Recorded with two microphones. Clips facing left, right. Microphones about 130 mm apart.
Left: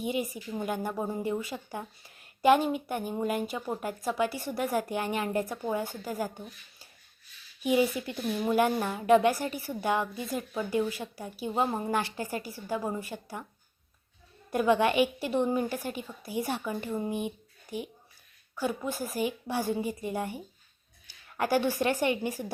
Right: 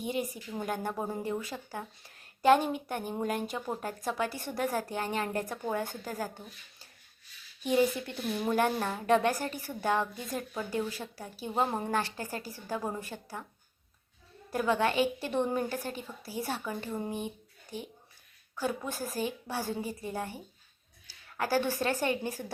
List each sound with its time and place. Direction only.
0.6 s a woman's voice: 10° left (ahead or behind)
7.6 s a woman's voice: 10° left (ahead or behind)
10.7 s a woman's voice: 15° left (ahead or behind)
14.5 s a woman's voice: 15° left (ahead or behind)